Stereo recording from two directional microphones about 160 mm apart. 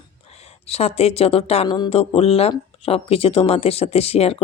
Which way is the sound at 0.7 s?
40° left (ahead or behind).